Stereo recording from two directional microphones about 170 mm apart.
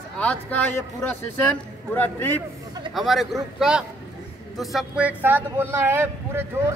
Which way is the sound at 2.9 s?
Centre (ahead or behind).